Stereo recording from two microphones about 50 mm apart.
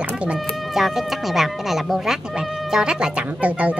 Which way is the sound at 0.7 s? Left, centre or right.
Centre.